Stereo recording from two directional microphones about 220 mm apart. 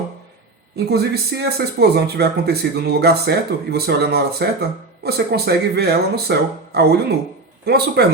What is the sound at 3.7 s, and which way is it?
Speech, 45° right (ahead or behind).